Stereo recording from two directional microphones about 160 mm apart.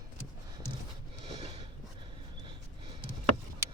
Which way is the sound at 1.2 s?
40° right (ahead or behind).